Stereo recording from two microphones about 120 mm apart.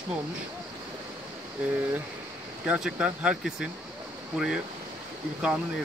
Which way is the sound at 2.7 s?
5° right (ahead or behind).